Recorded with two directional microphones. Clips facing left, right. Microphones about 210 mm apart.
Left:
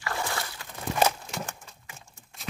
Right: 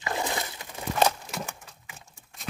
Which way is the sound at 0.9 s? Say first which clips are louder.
Right 1 dB; 10° left (ahead or behind).